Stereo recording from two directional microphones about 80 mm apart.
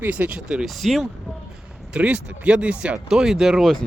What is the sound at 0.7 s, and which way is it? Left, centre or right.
Speech, centre.